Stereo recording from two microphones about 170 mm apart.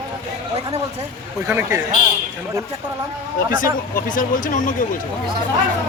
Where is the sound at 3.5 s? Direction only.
50° left (ahead or behind).